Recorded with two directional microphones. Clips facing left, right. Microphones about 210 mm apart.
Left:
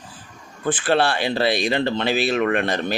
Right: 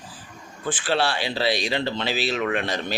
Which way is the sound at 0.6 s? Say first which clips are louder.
Left 4 dB; 55° left (ahead or behind).